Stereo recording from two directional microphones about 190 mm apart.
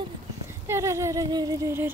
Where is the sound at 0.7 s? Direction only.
15° right (ahead or behind).